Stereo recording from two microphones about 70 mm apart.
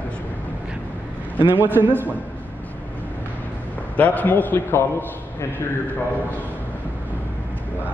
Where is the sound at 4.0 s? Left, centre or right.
Left.